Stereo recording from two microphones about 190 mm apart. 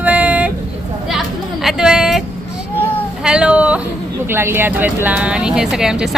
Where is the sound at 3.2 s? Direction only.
5° right (ahead or behind).